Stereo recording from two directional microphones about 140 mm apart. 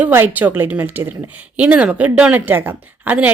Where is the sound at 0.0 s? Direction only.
15° right (ahead or behind).